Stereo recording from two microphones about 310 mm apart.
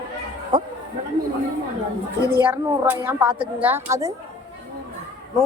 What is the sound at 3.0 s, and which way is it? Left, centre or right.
A woman's voice, centre.